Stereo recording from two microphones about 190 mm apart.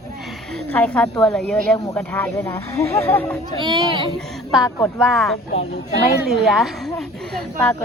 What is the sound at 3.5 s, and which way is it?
Speech, 25° right (ahead or behind).